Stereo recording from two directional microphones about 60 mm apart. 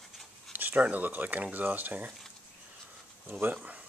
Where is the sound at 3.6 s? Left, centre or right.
Right.